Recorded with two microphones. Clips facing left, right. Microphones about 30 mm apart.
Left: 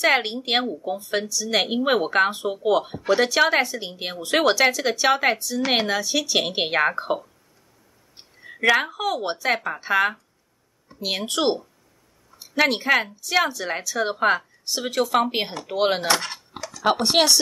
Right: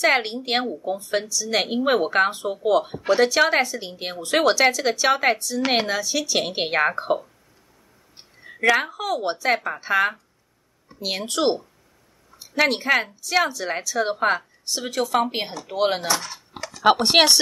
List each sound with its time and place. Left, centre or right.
0.0 s speech: centre
8.5 s a woman's voice: centre
12.4 s speech: centre
16.1 s speech: left
16.6 s a sound: right
17.0 s speech: right